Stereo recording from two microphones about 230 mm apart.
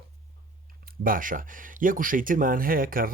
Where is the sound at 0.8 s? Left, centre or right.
Right.